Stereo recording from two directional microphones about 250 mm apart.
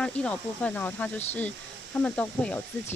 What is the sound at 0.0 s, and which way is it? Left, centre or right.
Speech, centre.